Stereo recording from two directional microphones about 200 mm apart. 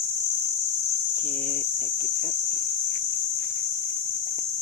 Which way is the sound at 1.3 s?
45° left (ahead or behind).